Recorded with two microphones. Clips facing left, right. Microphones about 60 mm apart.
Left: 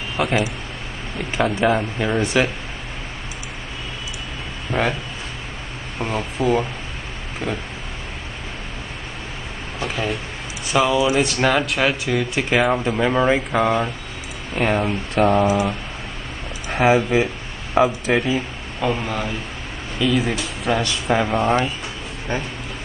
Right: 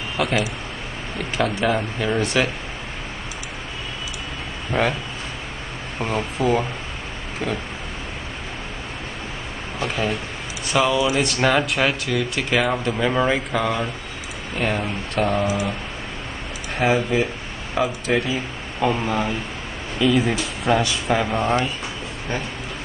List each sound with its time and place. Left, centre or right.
0.2 s speech: centre
4.6 s speech: centre
5.9 s speech: centre
9.8 s a sound: centre
10.7 s speech: centre
12.4 s speech: centre
16.7 s speech: centre
18.8 s speech: centre
21.1 s speech: centre
22.3 s speech: left